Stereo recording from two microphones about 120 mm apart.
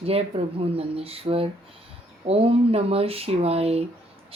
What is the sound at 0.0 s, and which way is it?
A woman's voice, 55° right (ahead or behind).